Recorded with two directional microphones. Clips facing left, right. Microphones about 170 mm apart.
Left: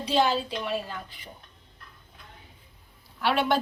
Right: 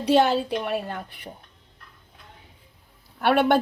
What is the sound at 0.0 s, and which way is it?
A woman's voice, 60° right (ahead or behind).